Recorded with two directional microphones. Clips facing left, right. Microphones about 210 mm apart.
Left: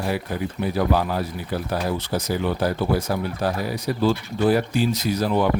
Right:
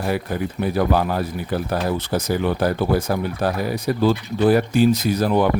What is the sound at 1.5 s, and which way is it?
Speech, 50° right (ahead or behind).